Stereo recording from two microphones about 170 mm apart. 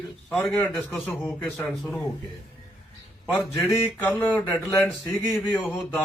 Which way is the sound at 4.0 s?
15° left (ahead or behind).